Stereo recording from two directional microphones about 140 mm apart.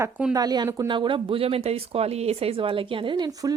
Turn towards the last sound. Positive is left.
turn(degrees=-25)  # may be behind; listen again after turning